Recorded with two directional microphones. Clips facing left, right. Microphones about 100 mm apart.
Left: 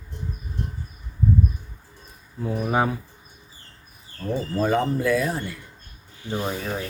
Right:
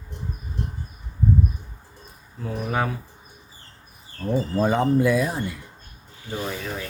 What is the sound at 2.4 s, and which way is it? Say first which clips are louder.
Speech: left 3 dB; 20° left (ahead or behind).